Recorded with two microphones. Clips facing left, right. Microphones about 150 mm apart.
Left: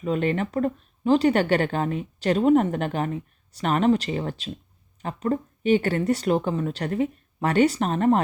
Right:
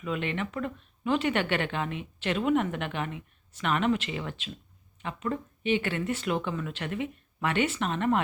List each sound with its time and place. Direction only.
0.0 s speech: 40° left (ahead or behind)